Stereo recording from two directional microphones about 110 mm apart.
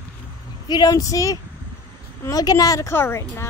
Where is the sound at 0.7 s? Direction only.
35° left (ahead or behind).